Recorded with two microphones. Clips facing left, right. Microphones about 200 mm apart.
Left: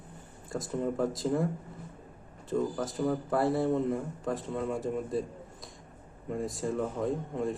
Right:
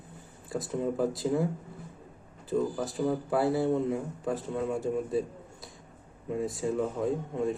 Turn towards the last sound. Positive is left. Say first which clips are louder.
# right 2 dB
turn(degrees=0)  # may be behind; listen again after turning